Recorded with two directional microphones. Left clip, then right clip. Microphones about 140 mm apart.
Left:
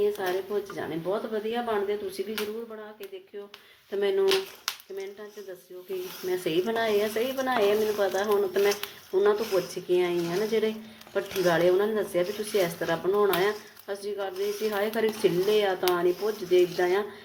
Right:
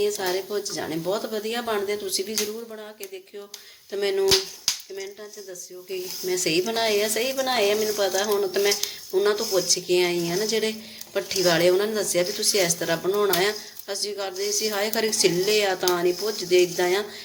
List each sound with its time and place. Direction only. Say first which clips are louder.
0.0 s speech: right 2 dB; 20° right (ahead or behind)
3.9 s speech: right 1 dB; 10° right (ahead or behind)
6.2 s speech: right 3 dB; 15° right (ahead or behind)